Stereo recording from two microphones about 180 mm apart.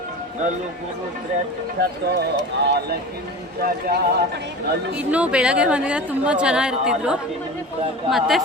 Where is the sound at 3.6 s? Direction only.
60° right (ahead or behind).